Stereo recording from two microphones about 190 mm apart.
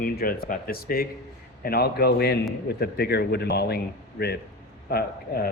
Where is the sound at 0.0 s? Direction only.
50° left (ahead or behind).